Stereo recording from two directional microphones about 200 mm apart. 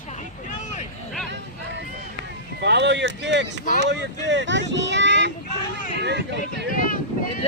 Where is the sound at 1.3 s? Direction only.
65° right (ahead or behind).